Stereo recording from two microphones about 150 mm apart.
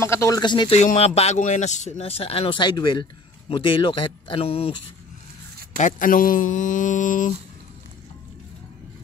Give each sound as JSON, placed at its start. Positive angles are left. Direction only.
{"t": 0.0, "sound": "speech", "side_deg": 20}
{"t": 0.4, "sound": "speech", "side_deg": 30}
{"t": 0.7, "sound": "speech", "side_deg": 50}
{"t": 5.8, "sound": "speech", "side_deg": 60}